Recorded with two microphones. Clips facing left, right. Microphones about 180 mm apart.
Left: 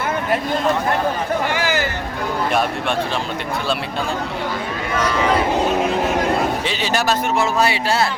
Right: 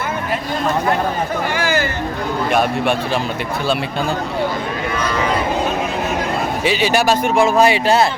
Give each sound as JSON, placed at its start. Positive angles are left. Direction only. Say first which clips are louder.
{"t": 1.5, "sound": "a sound", "louder": "right 2 dB", "side_deg": 20}
{"t": 2.5, "sound": "speech", "louder": "right 5 dB", "side_deg": 0}
{"t": 6.7, "sound": "a man's voice", "louder": "right 5 dB", "side_deg": -10}